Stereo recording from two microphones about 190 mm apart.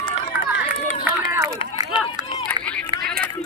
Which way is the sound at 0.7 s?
40° left (ahead or behind).